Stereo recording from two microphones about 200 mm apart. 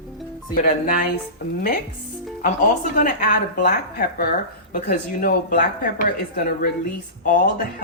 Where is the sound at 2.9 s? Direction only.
45° left (ahead or behind).